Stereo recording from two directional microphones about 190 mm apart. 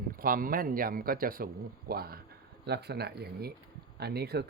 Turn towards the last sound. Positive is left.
turn(degrees=-60)  # may be behind; listen again after turning